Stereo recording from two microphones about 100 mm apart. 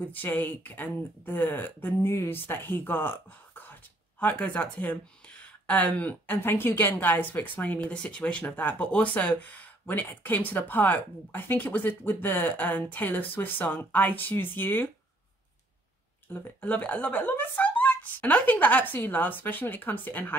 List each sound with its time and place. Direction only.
0.0 s speech: 15° left (ahead or behind)
16.3 s speech: 20° left (ahead or behind)